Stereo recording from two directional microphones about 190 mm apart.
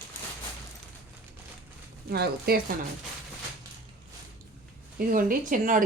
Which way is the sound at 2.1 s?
55° right (ahead or behind).